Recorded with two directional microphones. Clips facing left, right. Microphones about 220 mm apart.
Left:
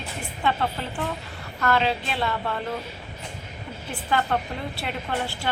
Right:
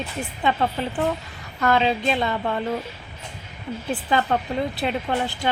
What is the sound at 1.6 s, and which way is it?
Speech, 15° right (ahead or behind).